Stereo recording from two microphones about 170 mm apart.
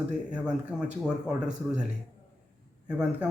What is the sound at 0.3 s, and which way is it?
Speech, 5° right (ahead or behind).